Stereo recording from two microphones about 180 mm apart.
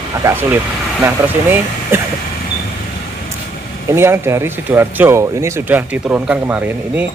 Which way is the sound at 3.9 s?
15° right (ahead or behind).